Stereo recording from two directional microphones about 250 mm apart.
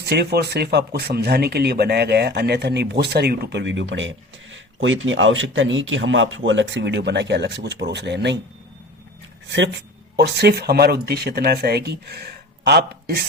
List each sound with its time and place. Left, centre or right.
0.0 s speech: right
9.5 s speech: right